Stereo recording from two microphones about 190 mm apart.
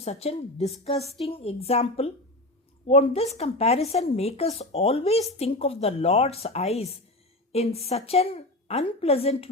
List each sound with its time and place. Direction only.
0.0 s a woman's voice: 35° left (ahead or behind)